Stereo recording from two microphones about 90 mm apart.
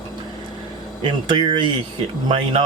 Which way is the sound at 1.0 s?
60° right (ahead or behind).